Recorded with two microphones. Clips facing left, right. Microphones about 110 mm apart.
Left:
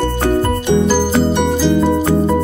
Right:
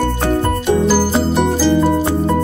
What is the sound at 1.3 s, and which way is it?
Music, centre (ahead or behind).